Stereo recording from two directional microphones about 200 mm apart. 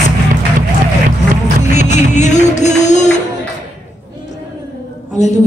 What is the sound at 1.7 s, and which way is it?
Music, 35° left (ahead or behind).